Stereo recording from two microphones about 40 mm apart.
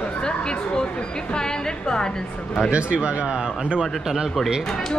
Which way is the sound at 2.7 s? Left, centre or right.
Right.